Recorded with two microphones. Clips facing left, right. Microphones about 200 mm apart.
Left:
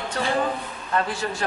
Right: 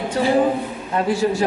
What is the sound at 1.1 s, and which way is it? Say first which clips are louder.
Speech: right 9 dB; centre (ahead or behind).